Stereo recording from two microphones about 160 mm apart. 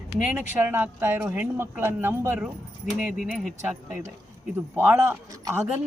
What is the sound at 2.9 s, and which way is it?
Speech, centre (ahead or behind).